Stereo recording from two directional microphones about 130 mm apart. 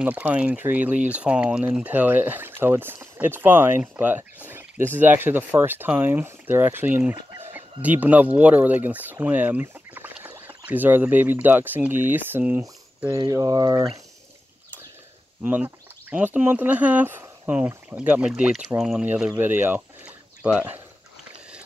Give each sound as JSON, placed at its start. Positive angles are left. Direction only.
{"t": 0.0, "sound": "speech", "side_deg": -10}
{"t": 13.1, "sound": "speech", "side_deg": -25}
{"t": 15.4, "sound": "speech", "side_deg": -10}